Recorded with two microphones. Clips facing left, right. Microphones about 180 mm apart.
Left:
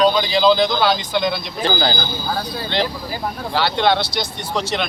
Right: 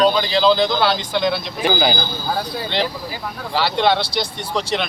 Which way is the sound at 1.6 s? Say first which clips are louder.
Right 2 dB; 15° right (ahead or behind).